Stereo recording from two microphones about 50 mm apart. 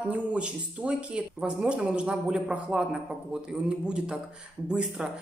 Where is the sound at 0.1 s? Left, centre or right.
Right.